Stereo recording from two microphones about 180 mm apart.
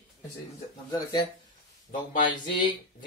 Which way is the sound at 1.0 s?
25° left (ahead or behind).